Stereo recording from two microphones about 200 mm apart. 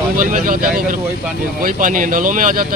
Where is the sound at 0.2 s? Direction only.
45° right (ahead or behind).